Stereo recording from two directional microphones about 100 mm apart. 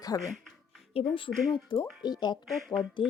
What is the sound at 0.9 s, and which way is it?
Speech, 75° left (ahead or behind).